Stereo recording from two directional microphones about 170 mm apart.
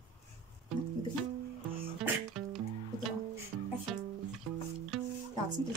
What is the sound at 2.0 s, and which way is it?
Music, centre (ahead or behind).